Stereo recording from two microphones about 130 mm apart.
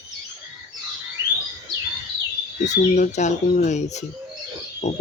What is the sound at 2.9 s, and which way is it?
Speech, 65° left (ahead or behind).